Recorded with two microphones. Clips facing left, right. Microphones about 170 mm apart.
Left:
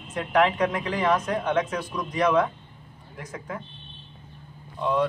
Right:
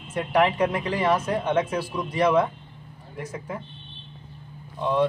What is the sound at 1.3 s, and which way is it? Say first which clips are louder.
Speech: right 1 dB; 30° right (ahead or behind).